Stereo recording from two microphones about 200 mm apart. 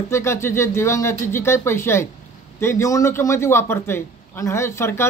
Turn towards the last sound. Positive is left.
turn(degrees=15)  # may be behind; listen again after turning